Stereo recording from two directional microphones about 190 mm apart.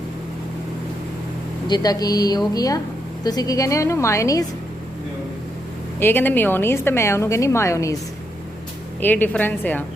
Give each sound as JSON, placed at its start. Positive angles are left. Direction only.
{"t": 1.6, "sound": "a woman's voice", "side_deg": 20}
{"t": 6.0, "sound": "a woman's voice", "side_deg": 10}
{"t": 9.0, "sound": "a woman's voice", "side_deg": 10}